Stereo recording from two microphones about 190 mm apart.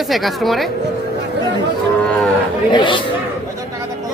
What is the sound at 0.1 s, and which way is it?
Speech, centre (ahead or behind).